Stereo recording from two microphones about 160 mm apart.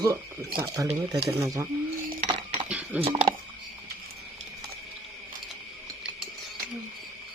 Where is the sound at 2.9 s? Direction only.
10° right (ahead or behind).